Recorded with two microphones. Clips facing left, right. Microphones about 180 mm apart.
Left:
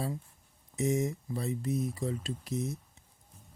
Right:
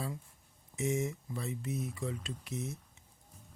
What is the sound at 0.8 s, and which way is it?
Speech, 35° left (ahead or behind).